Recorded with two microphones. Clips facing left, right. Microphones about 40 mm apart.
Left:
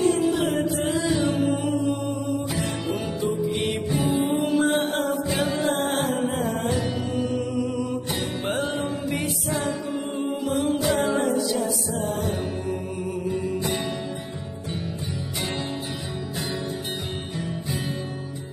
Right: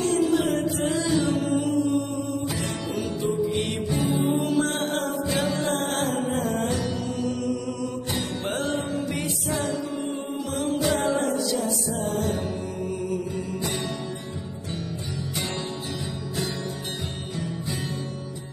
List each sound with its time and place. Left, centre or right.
0.0 s music: centre
2.5 s music: centre
12.1 s music: centre
17.4 s music: centre